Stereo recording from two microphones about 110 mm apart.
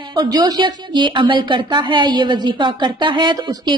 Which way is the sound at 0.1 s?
45° right (ahead or behind).